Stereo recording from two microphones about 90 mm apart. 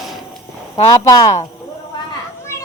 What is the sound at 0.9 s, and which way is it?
Speech, 45° left (ahead or behind).